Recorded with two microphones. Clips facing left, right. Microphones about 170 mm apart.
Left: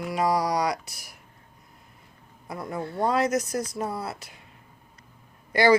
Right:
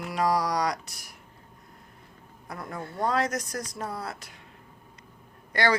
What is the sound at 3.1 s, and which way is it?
A woman's voice, 5° left (ahead or behind).